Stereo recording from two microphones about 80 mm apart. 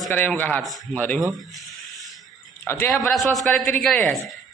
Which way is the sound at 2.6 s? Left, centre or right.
Left.